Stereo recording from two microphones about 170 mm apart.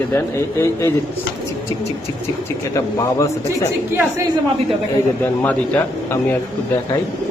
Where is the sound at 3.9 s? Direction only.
15° right (ahead or behind).